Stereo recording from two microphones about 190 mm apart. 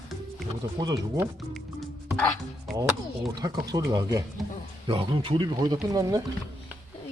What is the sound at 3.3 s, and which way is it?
Speech, 20° right (ahead or behind).